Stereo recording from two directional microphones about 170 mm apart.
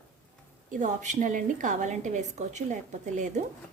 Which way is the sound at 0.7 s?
45° right (ahead or behind).